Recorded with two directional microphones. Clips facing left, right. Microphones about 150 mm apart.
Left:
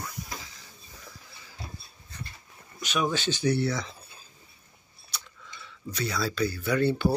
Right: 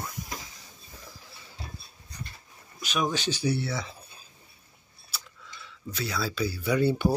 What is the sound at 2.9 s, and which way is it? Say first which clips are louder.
Speech: left 1 dB; 10° right (ahead or behind).